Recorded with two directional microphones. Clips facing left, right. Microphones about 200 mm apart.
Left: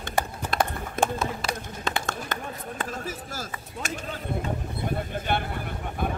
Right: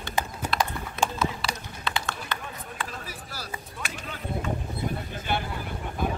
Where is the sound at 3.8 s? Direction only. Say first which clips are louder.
Left 5 dB; 45° left (ahead or behind).